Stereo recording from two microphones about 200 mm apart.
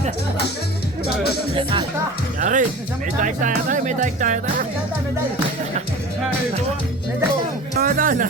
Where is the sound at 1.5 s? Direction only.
25° right (ahead or behind).